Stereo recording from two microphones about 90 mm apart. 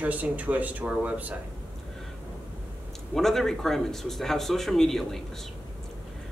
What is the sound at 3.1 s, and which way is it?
Speech, 5° left (ahead or behind).